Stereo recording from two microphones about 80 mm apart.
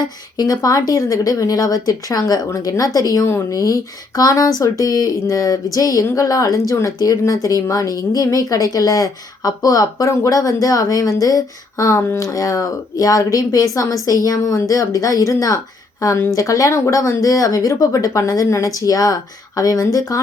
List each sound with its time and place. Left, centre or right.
0.3 s a woman's voice: left